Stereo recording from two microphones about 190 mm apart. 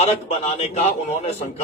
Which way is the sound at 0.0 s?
35° left (ahead or behind).